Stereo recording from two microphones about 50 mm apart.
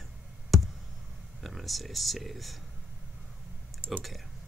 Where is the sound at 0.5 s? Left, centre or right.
Centre.